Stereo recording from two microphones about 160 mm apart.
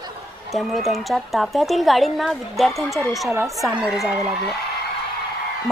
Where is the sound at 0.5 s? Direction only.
Centre (ahead or behind).